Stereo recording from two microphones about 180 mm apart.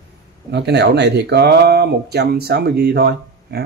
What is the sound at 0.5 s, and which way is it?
Speech, 65° right (ahead or behind).